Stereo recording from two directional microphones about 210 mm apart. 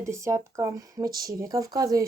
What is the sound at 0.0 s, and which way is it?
Speech, 15° right (ahead or behind).